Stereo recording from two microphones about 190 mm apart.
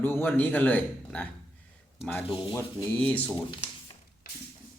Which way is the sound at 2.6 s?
10° left (ahead or behind).